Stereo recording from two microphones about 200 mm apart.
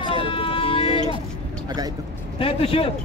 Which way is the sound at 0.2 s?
25° left (ahead or behind).